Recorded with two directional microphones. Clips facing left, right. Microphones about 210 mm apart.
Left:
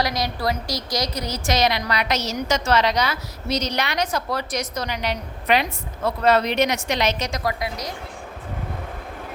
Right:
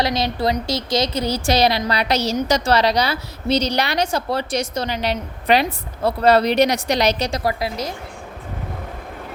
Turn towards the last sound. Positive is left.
turn(degrees=-30)  # may be behind; listen again after turning